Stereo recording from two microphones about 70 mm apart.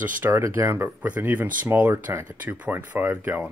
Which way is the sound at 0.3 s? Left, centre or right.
Right.